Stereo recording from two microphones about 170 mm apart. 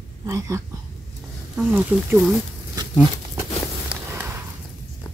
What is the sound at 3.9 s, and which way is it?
Walk, 10° right (ahead or behind).